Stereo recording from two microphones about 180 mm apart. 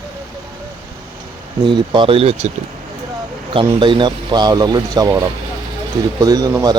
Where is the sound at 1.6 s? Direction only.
25° right (ahead or behind).